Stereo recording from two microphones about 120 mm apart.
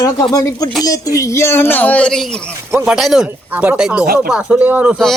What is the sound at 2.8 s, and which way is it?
Speech, 5° right (ahead or behind).